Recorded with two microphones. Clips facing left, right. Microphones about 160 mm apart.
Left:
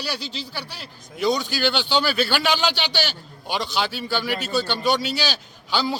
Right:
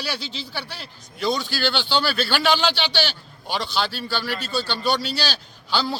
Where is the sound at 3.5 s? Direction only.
15° left (ahead or behind).